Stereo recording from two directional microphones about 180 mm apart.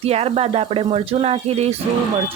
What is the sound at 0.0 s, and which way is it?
Speech, 35° right (ahead or behind).